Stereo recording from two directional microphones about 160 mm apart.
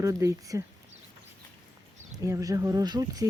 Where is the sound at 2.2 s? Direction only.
20° right (ahead or behind).